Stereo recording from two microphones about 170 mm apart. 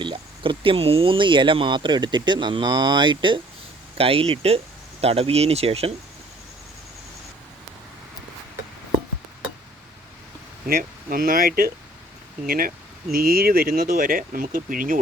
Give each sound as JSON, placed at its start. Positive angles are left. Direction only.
{"t": 0.0, "sound": "speech", "side_deg": -30}
{"t": 10.7, "sound": "speech", "side_deg": -60}